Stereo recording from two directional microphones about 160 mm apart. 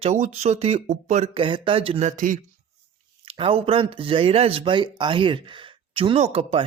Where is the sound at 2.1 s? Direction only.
55° right (ahead or behind).